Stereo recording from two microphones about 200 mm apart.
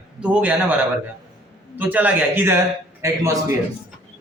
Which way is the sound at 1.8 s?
10° right (ahead or behind).